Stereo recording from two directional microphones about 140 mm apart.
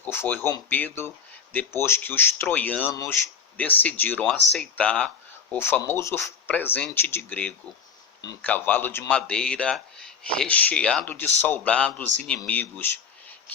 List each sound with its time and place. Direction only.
0.0 s speech: 15° left (ahead or behind)
2.9 s speech: 25° left (ahead or behind)
3.6 s speech: 10° left (ahead or behind)